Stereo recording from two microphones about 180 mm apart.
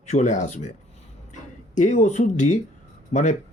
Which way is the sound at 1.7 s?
40° left (ahead or behind).